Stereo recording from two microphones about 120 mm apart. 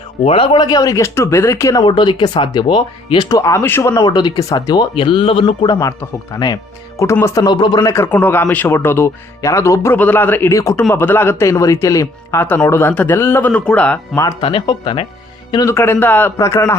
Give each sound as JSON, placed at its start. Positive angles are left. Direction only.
{"t": 0.3, "sound": "speech", "side_deg": 50}
{"t": 1.8, "sound": "speech", "side_deg": 40}
{"t": 6.3, "sound": "speech", "side_deg": 30}
{"t": 7.8, "sound": "speech", "side_deg": 20}
{"t": 10.5, "sound": "speech", "side_deg": 25}
{"t": 14.4, "sound": "speech", "side_deg": 45}
{"t": 15.5, "sound": "speech", "side_deg": 25}